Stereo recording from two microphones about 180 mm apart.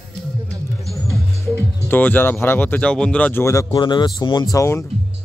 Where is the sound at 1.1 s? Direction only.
15° right (ahead or behind).